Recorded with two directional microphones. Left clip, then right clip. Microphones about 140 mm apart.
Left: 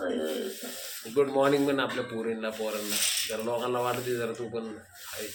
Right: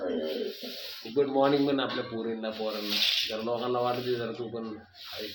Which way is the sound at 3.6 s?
5° right (ahead or behind).